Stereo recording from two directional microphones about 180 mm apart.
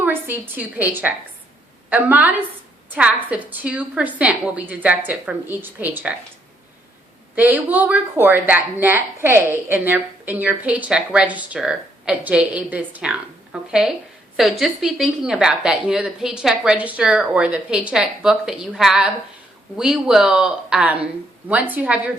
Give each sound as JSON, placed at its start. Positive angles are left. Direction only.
{"t": 0.0, "sound": "a woman's voice", "side_deg": -10}
{"t": 7.3, "sound": "a woman's voice", "side_deg": -10}